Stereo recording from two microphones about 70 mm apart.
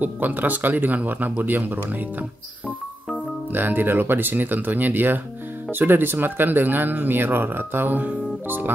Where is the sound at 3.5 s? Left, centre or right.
Right.